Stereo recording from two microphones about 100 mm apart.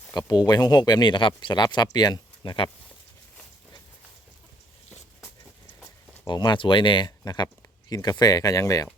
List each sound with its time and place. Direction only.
0.1 s speech: 40° left (ahead or behind)
6.2 s speech: 50° left (ahead or behind)